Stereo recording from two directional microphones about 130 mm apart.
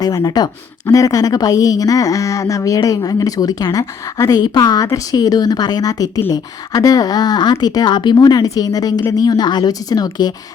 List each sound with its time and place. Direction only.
0.0 s a woman's voice: 30° left (ahead or behind)